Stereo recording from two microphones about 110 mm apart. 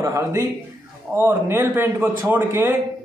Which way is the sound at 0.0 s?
30° right (ahead or behind).